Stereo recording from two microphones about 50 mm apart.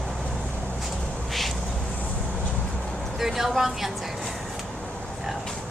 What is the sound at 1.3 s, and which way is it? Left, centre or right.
Insect, centre.